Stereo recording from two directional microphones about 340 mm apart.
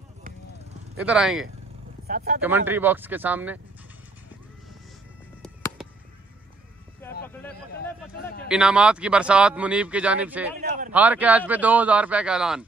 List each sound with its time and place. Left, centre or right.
1.0 s speech: centre
2.0 s speech: right
2.4 s speech: centre
5.4 s a sound: centre
7.0 s a sound: centre
8.5 s speech: centre
10.6 s speech: right
10.9 s speech: centre